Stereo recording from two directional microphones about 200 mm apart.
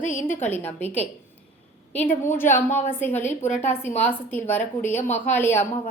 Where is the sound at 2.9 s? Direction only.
10° left (ahead or behind).